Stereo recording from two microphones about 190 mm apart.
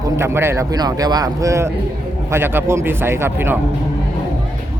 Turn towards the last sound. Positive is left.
turn(degrees=-10)  # may be behind; listen again after turning